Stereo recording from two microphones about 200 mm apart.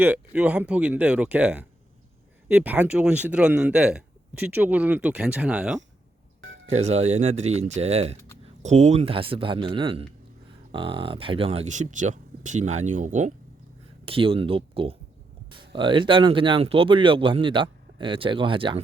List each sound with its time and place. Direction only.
0.0 s speech: 5° right (ahead or behind)
6.7 s speech: 30° right (ahead or behind)
14.0 s speech: 25° right (ahead or behind)